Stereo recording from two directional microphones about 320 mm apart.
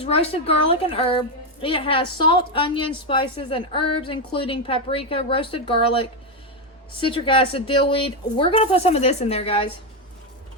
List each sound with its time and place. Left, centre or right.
0.0 s a woman's voice: centre